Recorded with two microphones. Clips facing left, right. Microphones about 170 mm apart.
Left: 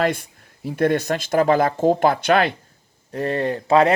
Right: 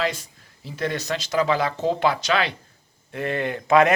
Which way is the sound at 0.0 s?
55° left (ahead or behind).